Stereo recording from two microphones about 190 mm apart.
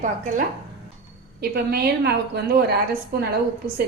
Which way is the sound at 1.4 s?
55° right (ahead or behind).